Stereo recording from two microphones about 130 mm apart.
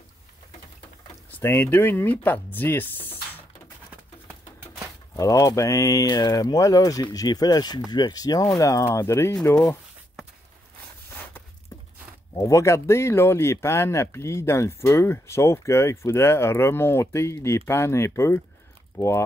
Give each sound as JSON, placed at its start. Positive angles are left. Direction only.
{"t": 1.4, "sound": "speech", "side_deg": 15}
{"t": 5.1, "sound": "speech", "side_deg": 25}
{"t": 11.7, "sound": "a sound", "side_deg": 30}
{"t": 12.4, "sound": "speech", "side_deg": 25}